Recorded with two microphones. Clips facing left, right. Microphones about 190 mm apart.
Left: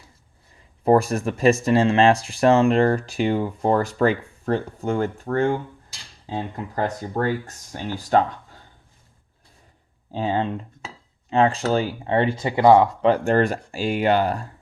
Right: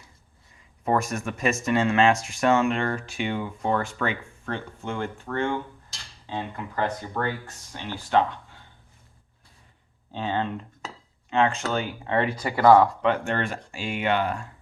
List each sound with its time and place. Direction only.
0.9 s speech: 35° left (ahead or behind)
10.1 s speech: 35° left (ahead or behind); by 12.9 s 20° left (ahead or behind)
13.0 s speech: 35° left (ahead or behind)